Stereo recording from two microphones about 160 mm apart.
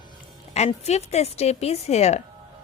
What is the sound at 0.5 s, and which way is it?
Speech, 45° left (ahead or behind).